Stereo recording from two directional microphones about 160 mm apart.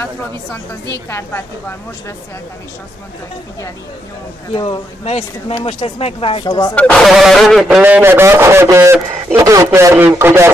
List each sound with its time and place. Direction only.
4.6 s speech: 35° left (ahead or behind)
6.7 s a man's voice: 5° left (ahead or behind); by 10.5 s 15° right (ahead or behind)